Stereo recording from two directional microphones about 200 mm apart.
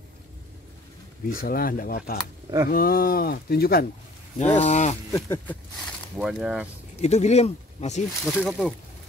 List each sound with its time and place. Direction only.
1.4 s speech: 45° left (ahead or behind)
4.4 s speech: 35° left (ahead or behind)
5.1 s speech: 10° left (ahead or behind)
5.8 s speech: centre (ahead or behind)
7.0 s speech: 35° left (ahead or behind)
8.1 s speech: centre (ahead or behind)